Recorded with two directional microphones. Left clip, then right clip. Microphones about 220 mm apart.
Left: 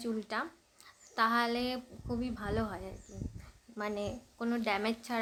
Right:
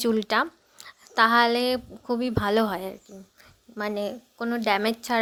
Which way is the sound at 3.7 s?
25° right (ahead or behind).